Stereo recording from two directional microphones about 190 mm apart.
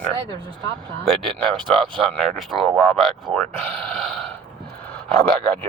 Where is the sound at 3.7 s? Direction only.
5° left (ahead or behind).